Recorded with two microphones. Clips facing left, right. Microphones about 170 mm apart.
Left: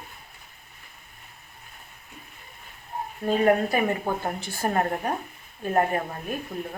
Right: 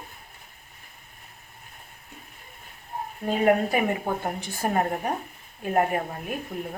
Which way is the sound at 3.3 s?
15° right (ahead or behind).